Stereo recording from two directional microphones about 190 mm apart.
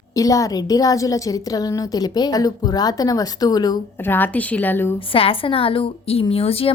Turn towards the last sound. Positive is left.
turn(degrees=30)  # may be behind; listen again after turning